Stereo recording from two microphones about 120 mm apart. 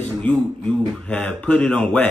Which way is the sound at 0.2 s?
10° left (ahead or behind).